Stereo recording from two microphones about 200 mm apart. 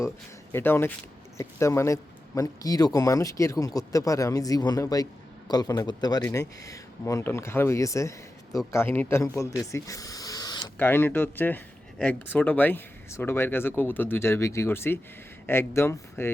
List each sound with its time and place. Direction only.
0.5 s a man's voice: 10° left (ahead or behind)